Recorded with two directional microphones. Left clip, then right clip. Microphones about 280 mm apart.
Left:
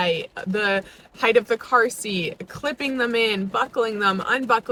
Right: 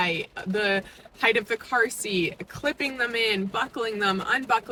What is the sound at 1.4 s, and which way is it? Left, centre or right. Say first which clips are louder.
Speech: left 5 dB; centre.